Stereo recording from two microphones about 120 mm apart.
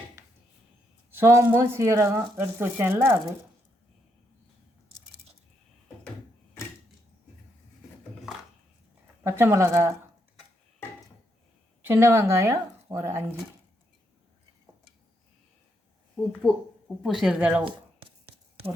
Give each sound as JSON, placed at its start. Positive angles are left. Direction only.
{"t": 0.2, "sound": "dishes", "side_deg": -25}
{"t": 1.1, "sound": "speech", "side_deg": -20}
{"t": 9.2, "sound": "speech", "side_deg": -20}
{"t": 11.8, "sound": "speech", "side_deg": -20}
{"t": 16.4, "sound": "speech", "side_deg": 40}
{"t": 17.0, "sound": "speech", "side_deg": 0}